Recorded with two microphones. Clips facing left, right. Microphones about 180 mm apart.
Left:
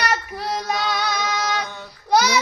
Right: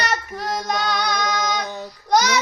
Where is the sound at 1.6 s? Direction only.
40° right (ahead or behind).